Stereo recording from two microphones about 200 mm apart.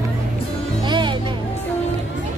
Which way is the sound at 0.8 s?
25° right (ahead or behind).